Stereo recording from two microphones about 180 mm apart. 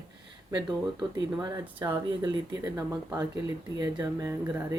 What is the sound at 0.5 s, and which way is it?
Speech, 20° right (ahead or behind).